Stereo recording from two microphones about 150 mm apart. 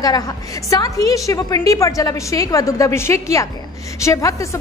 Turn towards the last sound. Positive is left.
turn(degrees=20)  # may be behind; listen again after turning